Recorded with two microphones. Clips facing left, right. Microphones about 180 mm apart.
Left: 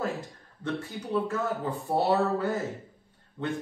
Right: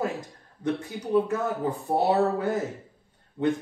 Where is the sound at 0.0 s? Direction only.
20° right (ahead or behind).